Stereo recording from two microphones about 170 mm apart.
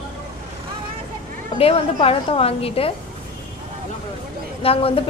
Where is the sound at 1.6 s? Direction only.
35° left (ahead or behind).